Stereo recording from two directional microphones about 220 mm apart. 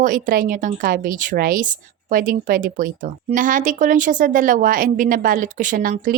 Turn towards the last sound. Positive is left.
turn(degrees=-40)  # may be behind; listen again after turning